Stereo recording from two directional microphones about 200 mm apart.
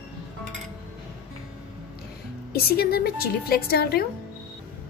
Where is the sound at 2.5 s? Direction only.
50° left (ahead or behind).